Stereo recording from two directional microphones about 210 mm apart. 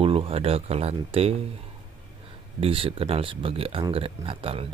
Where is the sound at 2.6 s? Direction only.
25° right (ahead or behind).